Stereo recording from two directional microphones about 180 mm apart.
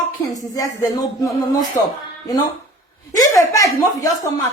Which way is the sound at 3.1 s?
20° left (ahead or behind).